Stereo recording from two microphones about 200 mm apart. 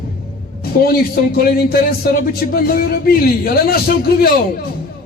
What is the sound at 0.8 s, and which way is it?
A man's voice, 50° left (ahead or behind).